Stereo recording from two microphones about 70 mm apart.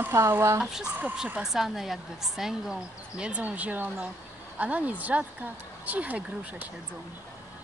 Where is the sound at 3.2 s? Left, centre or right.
Right.